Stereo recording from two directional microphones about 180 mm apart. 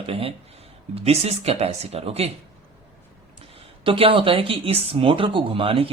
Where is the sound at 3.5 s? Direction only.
30° right (ahead or behind).